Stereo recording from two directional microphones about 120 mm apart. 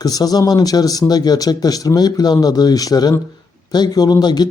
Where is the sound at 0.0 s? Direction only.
30° left (ahead or behind).